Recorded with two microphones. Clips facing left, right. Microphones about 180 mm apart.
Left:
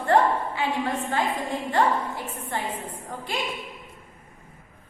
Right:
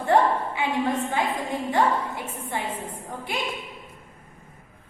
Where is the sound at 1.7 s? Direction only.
15° right (ahead or behind).